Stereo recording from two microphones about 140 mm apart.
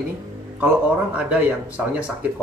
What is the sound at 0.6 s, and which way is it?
Speech, 10° right (ahead or behind).